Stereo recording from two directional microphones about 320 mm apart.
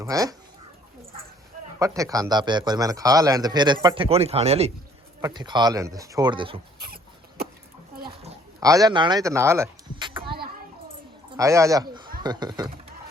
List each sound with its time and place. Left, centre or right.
0.0 s speech: centre
1.8 s a man's voice: centre
6.7 s cough: right
8.0 s a sound: centre
11.3 s a man's voice: centre